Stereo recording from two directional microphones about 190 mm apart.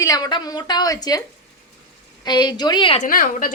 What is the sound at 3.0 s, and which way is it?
Speech, 50° left (ahead or behind).